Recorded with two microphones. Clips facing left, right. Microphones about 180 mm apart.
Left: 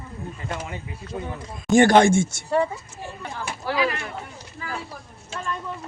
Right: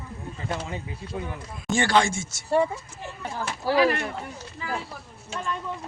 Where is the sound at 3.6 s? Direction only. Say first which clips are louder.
Right 4 dB; 40° right (ahead or behind).